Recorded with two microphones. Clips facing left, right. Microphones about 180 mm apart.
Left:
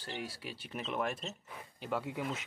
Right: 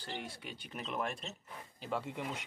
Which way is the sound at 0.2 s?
5° left (ahead or behind).